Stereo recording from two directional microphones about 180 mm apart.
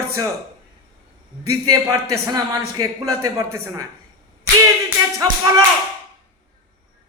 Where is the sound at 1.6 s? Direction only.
20° right (ahead or behind).